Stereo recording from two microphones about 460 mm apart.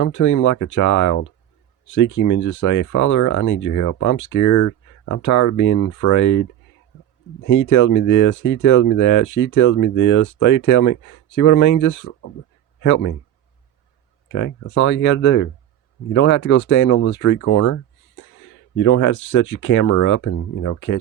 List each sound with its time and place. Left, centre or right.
0.0 s speech: left
14.8 s speech: left
15.1 s speech: left
16.6 s speech: left
16.8 s speech: left
17.2 s speech: left
18.8 s speech: left